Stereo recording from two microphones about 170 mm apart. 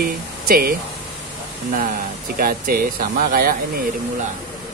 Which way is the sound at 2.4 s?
60° right (ahead or behind).